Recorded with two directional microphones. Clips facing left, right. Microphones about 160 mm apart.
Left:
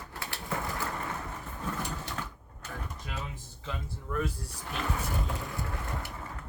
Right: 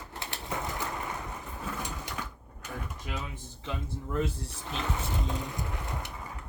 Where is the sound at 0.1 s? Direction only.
20° right (ahead or behind).